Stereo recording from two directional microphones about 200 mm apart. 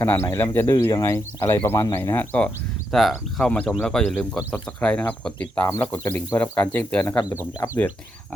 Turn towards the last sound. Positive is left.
turn(degrees=10)  # may be behind; listen again after turning